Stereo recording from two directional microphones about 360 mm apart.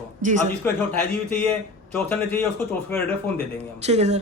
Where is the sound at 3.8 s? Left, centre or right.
Centre.